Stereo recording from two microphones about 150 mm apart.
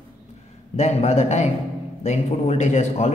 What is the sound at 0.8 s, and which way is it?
A man's voice, 50° left (ahead or behind).